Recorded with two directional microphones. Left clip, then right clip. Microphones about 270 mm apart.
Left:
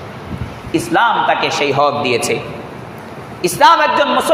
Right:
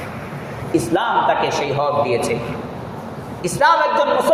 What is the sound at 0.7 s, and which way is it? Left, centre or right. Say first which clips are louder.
A man's voice: left 4 dB; left.